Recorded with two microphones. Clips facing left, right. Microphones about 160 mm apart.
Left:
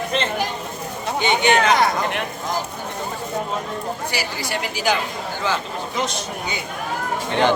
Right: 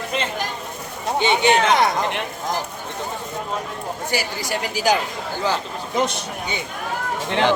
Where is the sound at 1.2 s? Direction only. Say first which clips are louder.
Even; 30° right (ahead or behind).